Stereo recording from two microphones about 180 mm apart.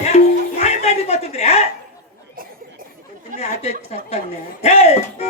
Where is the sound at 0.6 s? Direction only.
35° left (ahead or behind).